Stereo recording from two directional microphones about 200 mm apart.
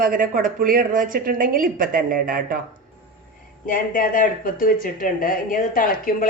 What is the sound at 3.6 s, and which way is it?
Speech, 45° left (ahead or behind).